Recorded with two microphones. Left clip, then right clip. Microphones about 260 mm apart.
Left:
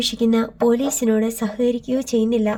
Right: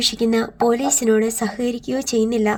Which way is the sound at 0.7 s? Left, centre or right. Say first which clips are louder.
Right 2 dB; right.